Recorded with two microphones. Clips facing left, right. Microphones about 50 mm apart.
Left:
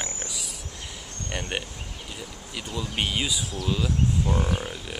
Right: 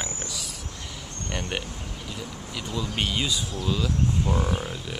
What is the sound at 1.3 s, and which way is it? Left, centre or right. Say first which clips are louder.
Speech: even; centre.